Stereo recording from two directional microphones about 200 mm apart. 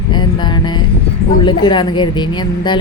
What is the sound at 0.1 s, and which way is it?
Music, 20° left (ahead or behind).